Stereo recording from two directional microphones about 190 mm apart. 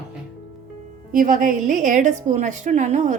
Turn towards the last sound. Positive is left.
turn(degrees=-40)  # may be behind; listen again after turning